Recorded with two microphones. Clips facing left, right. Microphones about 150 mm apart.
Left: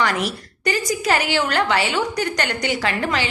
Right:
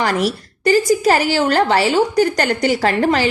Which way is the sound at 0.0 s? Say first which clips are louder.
Right 4 dB; 35° right (ahead or behind).